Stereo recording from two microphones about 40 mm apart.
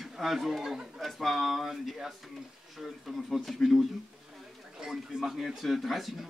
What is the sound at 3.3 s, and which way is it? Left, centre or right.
Speech, centre.